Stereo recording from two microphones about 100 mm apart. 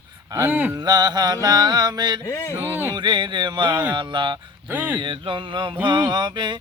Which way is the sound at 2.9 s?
50° right (ahead or behind).